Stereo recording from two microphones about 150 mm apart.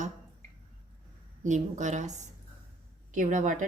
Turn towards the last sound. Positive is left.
turn(degrees=-55)  # may be behind; listen again after turning